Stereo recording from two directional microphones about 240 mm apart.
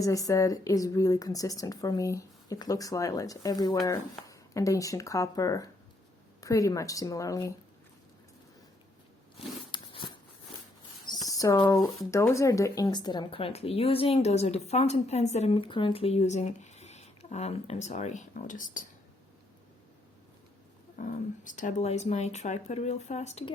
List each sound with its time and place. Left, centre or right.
0.0 s a woman's voice: centre
9.7 s a sound: left
11.3 s speech: centre; by 18.9 s left
21.0 s speech: left